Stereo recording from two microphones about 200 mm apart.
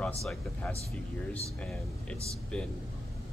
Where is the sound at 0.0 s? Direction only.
5° left (ahead or behind).